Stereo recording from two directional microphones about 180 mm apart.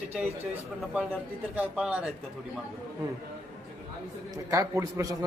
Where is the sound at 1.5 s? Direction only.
5° right (ahead or behind).